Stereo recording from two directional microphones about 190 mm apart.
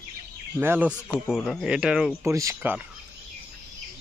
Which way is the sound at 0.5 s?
10° right (ahead or behind).